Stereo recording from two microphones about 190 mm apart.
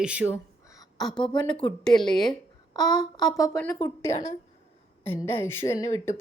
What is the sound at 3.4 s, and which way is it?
Speech, 10° left (ahead or behind).